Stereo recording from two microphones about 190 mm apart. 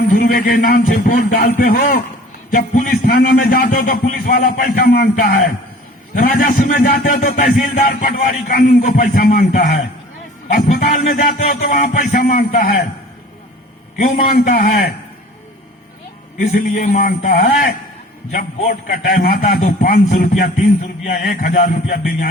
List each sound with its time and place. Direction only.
0.1 s a man's voice: 50° left (ahead or behind)
14.0 s a man's voice: 45° left (ahead or behind)
16.4 s a man's voice: 45° left (ahead or behind)